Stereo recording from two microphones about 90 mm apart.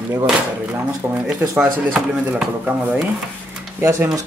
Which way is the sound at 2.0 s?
10° right (ahead or behind).